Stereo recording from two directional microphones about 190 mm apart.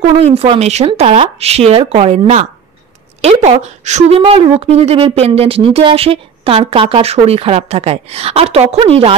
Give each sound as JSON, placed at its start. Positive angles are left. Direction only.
{"t": 0.0, "sound": "speech", "side_deg": -35}